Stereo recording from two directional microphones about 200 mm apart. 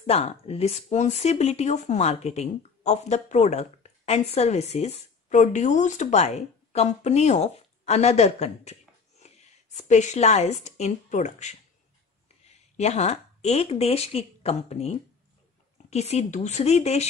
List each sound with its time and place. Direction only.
0.0 s speech: 30° left (ahead or behind)
12.7 s speech: 35° left (ahead or behind)